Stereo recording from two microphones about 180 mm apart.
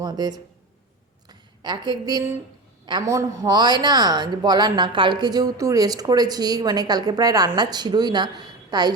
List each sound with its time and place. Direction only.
0.0 s speech: 20° right (ahead or behind)